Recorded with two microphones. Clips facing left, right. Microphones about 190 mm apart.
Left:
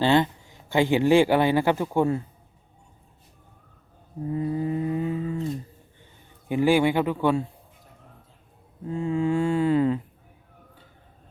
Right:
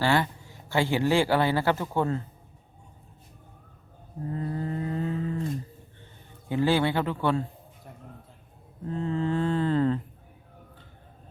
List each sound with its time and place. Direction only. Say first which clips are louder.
0.0 s speech: left 4 dB; 20° left (ahead or behind)
4.3 s a sound: left 6 dB; 15° left (ahead or behind)
6.5 s speech: left 4 dB; 15° left (ahead or behind)
8.9 s mantra: left 4 dB; 10° left (ahead or behind)